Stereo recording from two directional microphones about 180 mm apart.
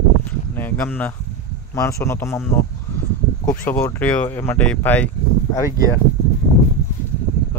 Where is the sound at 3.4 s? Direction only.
15° left (ahead or behind).